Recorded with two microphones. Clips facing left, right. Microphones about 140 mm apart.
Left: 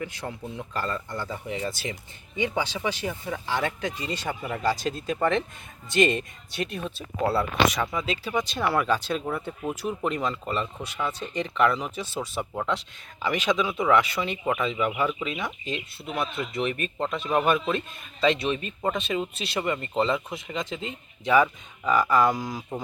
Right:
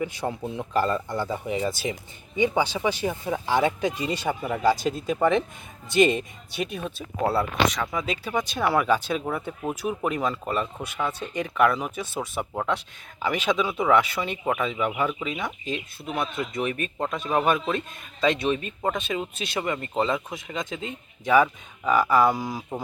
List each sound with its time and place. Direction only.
0.3 s speech: 25° right (ahead or behind)
0.7 s speech: 10° right (ahead or behind)
3.1 s speech: 20° right (ahead or behind)
3.4 s speech: 10° right (ahead or behind)
18.9 s speech: centre (ahead or behind)